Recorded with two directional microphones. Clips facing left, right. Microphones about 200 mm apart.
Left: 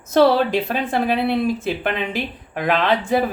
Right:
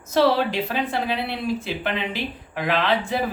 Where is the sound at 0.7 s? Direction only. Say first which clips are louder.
Left 4 dB; 50° left (ahead or behind).